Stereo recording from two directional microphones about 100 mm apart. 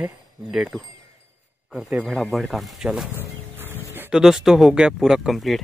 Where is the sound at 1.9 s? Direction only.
15° right (ahead or behind).